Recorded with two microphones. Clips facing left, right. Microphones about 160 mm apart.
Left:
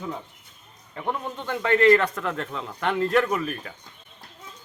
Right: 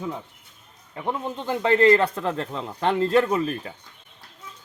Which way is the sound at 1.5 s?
30° right (ahead or behind).